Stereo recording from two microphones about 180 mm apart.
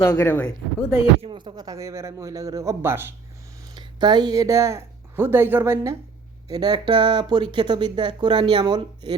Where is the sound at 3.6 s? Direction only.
25° right (ahead or behind).